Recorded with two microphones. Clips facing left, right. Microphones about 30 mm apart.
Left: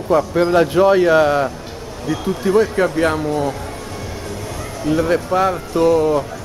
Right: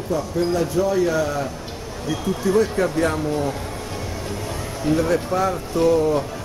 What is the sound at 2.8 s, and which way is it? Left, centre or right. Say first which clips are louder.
Speech: left 4 dB; left.